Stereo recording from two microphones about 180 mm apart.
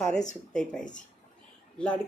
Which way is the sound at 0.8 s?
45° left (ahead or behind).